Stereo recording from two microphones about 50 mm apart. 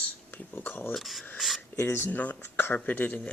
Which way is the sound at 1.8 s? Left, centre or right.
Left.